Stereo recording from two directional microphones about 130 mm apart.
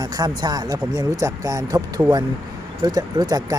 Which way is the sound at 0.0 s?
30° right (ahead or behind).